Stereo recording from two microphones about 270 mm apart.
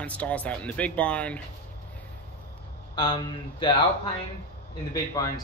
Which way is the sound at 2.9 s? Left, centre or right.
Centre.